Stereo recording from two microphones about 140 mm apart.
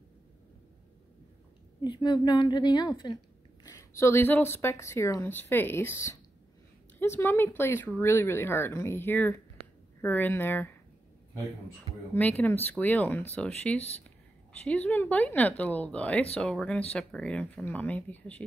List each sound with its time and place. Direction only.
1.8 s a woman's voice: 30° left (ahead or behind); by 10.7 s 15° left (ahead or behind)
12.1 s speech: 10° left (ahead or behind)